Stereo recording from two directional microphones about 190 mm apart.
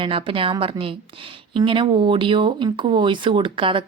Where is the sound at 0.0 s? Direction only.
30° right (ahead or behind).